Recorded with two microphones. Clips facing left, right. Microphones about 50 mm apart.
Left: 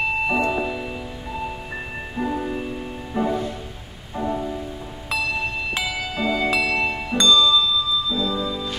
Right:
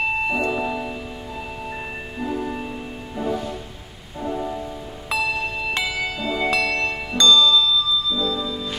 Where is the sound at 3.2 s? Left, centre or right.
Left.